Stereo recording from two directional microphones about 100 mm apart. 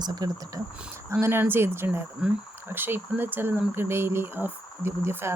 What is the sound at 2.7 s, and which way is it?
Speech, 20° right (ahead or behind).